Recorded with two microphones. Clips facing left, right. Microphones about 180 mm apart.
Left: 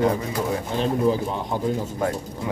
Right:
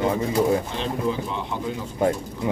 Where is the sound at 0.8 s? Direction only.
40° left (ahead or behind).